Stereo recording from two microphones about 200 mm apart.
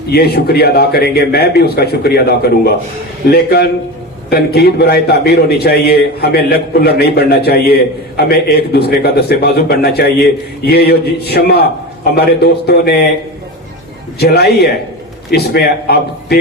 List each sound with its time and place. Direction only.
0.1 s a man's voice: 50° left (ahead or behind)
14.2 s a man's voice: 55° left (ahead or behind)